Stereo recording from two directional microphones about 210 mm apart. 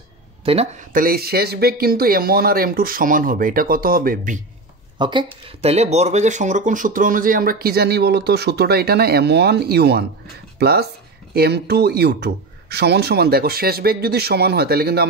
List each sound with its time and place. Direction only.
0.5 s speech: 30° right (ahead or behind)
0.9 s speech: 45° right (ahead or behind)
4.9 s speech: 20° right (ahead or behind); by 15.0 s 50° right (ahead or behind)